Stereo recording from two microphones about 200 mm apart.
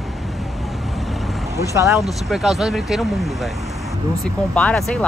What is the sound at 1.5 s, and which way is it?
Speech, 15° right (ahead or behind).